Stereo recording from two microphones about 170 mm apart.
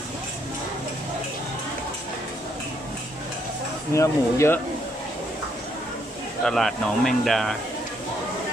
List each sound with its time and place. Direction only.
3.9 s speech: 15° left (ahead or behind)
6.4 s speech: centre (ahead or behind)